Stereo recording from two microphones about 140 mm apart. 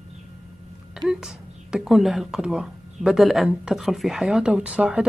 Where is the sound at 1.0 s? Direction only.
5° right (ahead or behind).